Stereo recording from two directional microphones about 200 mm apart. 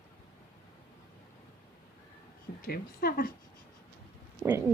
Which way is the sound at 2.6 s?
50° left (ahead or behind).